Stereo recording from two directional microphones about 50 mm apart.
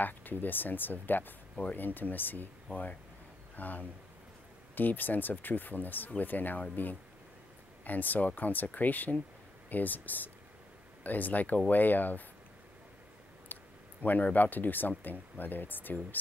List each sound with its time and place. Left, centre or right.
0.0 s speech: left
13.5 s a sound: left
14.0 s speech: left